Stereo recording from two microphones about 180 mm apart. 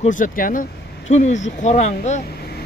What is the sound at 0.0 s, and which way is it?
Speech, 45° left (ahead or behind).